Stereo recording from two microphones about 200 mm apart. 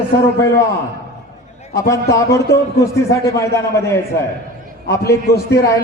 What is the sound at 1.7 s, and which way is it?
A man's voice, 15° left (ahead or behind).